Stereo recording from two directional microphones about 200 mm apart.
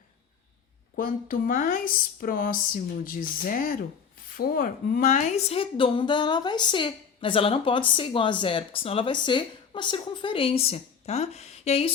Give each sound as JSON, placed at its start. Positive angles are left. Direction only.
{"t": 0.9, "sound": "a woman's voice", "side_deg": 45}